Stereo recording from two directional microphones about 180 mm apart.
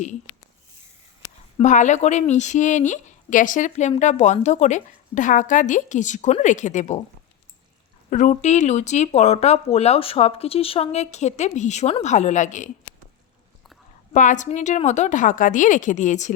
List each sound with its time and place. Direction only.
1.5 s a woman's voice: 40° left (ahead or behind)
8.1 s speech: 45° left (ahead or behind)
14.1 s a woman's voice: 45° left (ahead or behind)